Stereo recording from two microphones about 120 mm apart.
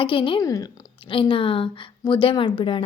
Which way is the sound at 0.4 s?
30° left (ahead or behind).